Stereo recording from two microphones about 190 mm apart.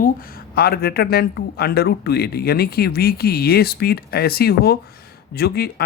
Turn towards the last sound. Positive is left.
turn(degrees=55)  # may be behind; listen again after turning